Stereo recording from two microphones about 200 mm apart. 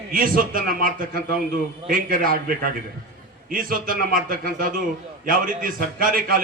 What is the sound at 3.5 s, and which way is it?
A man's voice, 45° right (ahead or behind).